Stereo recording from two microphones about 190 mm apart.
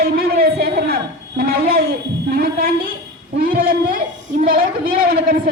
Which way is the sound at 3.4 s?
50° right (ahead or behind).